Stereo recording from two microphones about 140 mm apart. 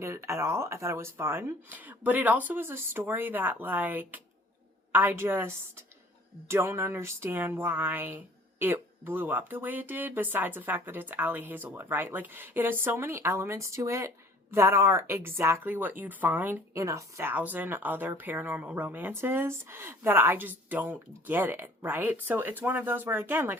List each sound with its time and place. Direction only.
0.0 s speech: 20° right (ahead or behind)